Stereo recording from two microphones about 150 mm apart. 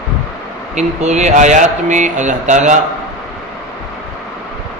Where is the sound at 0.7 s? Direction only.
50° right (ahead or behind).